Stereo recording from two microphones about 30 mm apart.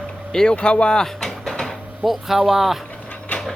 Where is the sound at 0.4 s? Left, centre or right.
Left.